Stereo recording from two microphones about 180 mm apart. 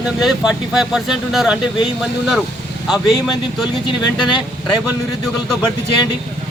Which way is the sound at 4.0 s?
25° left (ahead or behind).